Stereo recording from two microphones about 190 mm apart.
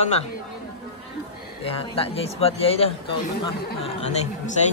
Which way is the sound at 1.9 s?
30° left (ahead or behind).